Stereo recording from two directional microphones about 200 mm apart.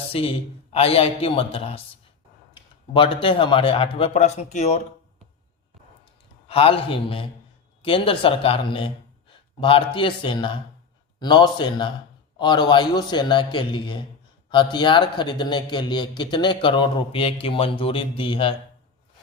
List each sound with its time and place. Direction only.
0.1 s a man's voice: 30° left (ahead or behind)
6.5 s a man's voice: 30° left (ahead or behind)